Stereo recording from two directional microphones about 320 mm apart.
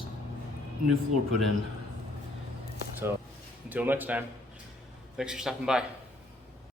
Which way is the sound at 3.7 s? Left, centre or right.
Centre.